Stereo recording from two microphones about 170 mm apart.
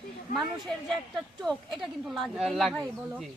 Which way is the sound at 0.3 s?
Centre (ahead or behind).